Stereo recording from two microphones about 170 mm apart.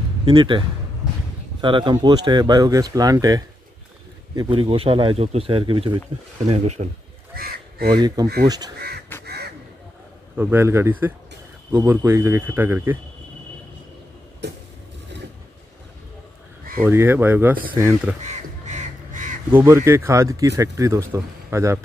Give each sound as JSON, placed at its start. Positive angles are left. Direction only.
{"t": 0.2, "sound": "speech", "side_deg": -30}
{"t": 6.5, "sound": "speech", "side_deg": -40}
{"t": 7.3, "sound": "a sound", "side_deg": -65}
{"t": 7.9, "sound": "speech", "side_deg": -25}
{"t": 8.7, "sound": "crow", "side_deg": -70}
{"t": 9.2, "sound": "duck", "side_deg": -70}
{"t": 10.3, "sound": "speech", "side_deg": -10}
{"t": 16.8, "sound": "speech", "side_deg": -15}
{"t": 18.2, "sound": "crow", "side_deg": -45}
{"t": 19.5, "sound": "speech", "side_deg": -15}